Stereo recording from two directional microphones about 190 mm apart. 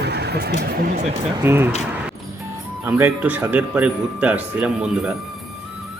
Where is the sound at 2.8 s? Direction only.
10° right (ahead or behind).